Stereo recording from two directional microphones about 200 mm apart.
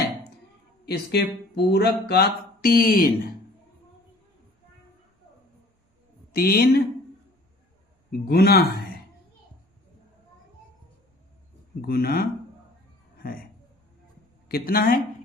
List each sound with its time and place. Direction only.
0.9 s speech: 55° left (ahead or behind)
6.3 s speech: 50° left (ahead or behind)
8.3 s speech: 55° left (ahead or behind)
11.8 s speech: 50° left (ahead or behind)
13.1 s a sound: 45° left (ahead or behind)
14.4 s speech: 50° left (ahead or behind)